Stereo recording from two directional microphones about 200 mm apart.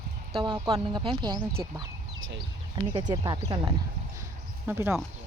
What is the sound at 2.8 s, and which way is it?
Speech, 25° right (ahead or behind).